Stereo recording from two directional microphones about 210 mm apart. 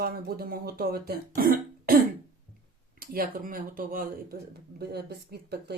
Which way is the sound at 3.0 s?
45° right (ahead or behind).